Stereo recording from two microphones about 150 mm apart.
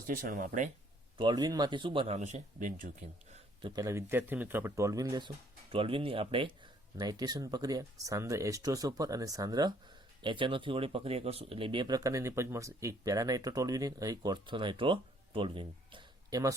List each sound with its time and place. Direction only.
0.1 s speech: 65° right (ahead or behind)
1.2 s speech: 25° right (ahead or behind); by 3.4 s 60° right (ahead or behind)
3.6 s speech: 25° right (ahead or behind)
5.7 s speech: 40° right (ahead or behind)
6.9 s speech: 25° right (ahead or behind)